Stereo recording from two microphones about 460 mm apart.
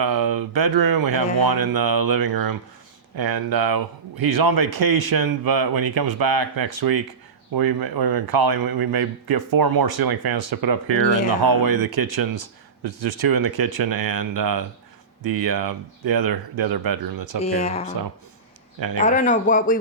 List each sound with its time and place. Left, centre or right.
0.0 s speech: right
17.4 s speech: centre
18.9 s speech: centre